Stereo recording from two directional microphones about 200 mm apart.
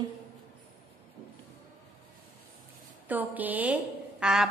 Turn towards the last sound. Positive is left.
turn(degrees=-5)  # may be behind; listen again after turning